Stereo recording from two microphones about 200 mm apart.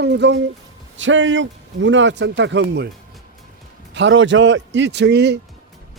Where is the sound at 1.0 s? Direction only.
70° right (ahead or behind).